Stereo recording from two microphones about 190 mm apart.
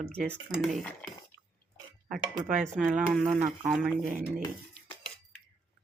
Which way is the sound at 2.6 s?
Centre (ahead or behind).